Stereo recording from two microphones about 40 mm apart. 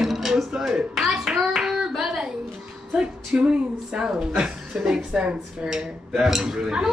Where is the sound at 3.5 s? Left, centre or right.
Right.